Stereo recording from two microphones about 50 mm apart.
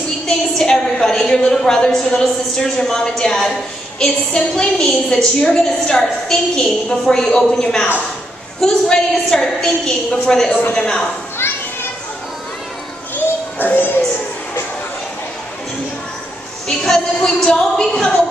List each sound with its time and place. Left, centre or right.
0.6 s a woman's voice: centre
13.1 s children playing: left
16.6 s a woman's voice: centre